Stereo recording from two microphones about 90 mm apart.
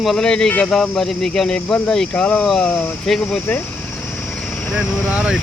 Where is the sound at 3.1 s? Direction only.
10° left (ahead or behind).